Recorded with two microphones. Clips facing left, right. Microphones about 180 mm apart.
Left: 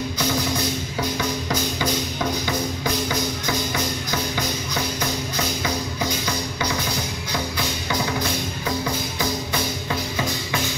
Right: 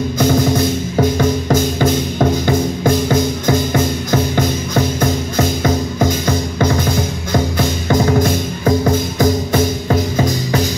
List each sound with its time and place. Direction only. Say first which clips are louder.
0.2 s music: right 11 dB; 45° right (ahead or behind)